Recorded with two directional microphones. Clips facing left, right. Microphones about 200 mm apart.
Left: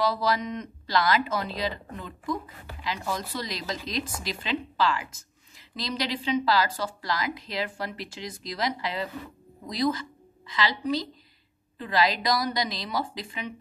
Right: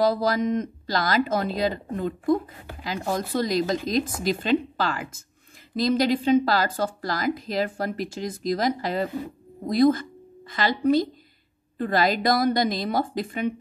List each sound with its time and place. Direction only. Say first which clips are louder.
0.0 s speech: right 5 dB; 50° right (ahead or behind)